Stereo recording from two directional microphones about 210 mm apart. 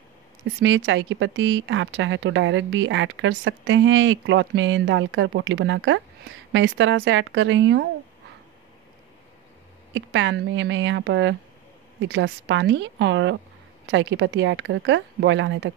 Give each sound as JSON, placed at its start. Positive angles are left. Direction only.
{"t": 0.6, "sound": "speech", "side_deg": -60}
{"t": 9.9, "sound": "speech", "side_deg": -60}